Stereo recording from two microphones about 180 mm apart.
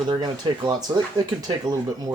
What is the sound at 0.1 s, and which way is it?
Speech, 25° right (ahead or behind).